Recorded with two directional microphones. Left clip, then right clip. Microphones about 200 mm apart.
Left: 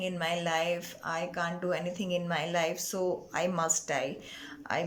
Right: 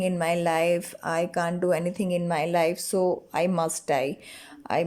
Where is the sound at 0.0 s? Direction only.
25° right (ahead or behind).